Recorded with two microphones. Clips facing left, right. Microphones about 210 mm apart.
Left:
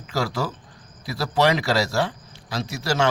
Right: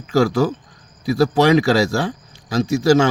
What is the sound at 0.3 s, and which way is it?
A man's voice, 50° right (ahead or behind).